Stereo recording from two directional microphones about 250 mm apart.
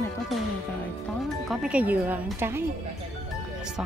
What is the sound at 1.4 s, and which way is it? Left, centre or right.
Speech, centre.